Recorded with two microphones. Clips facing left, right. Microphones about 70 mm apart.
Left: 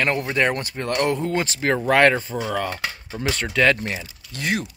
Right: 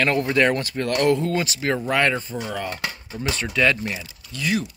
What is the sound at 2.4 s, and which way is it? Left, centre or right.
Cutlery, left.